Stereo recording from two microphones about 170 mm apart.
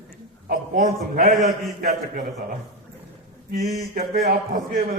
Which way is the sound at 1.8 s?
60° right (ahead or behind).